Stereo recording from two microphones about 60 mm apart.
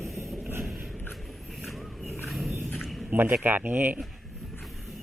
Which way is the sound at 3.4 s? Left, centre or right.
Right.